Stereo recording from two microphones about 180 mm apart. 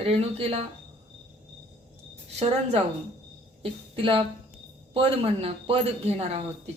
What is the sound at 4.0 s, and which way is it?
Speech, 30° right (ahead or behind).